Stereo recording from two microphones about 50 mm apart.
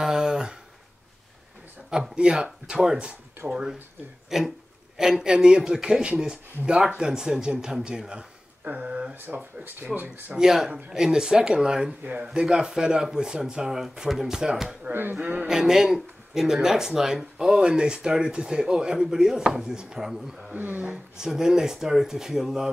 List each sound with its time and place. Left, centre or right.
0.0 s a sound: centre
1.9 s speech: centre
9.1 s speech: right
10.3 s speech: centre
14.9 s speech: right
15.1 s speech: right
15.4 s speech: centre
20.5 s speech: right
20.8 s speech: centre